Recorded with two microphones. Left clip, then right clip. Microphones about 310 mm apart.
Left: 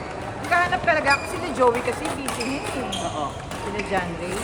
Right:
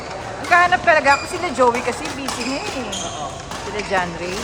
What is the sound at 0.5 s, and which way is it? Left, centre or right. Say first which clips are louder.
Speech: right 7 dB; right.